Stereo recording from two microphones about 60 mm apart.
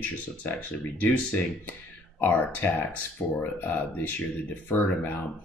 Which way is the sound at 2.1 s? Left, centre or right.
Left.